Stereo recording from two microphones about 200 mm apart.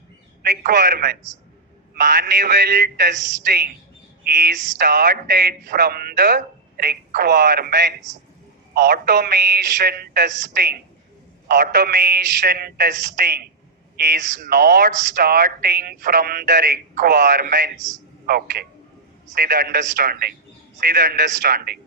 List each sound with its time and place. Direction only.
0.4 s speech: 50° right (ahead or behind)